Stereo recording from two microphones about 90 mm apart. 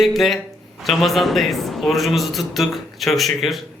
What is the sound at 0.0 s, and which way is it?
A man's voice, centre (ahead or behind).